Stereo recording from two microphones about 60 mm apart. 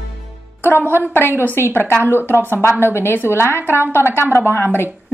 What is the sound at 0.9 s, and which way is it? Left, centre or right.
A woman's voice, left.